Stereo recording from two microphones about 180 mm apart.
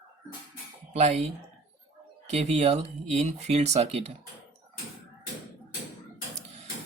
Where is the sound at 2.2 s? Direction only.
35° right (ahead or behind).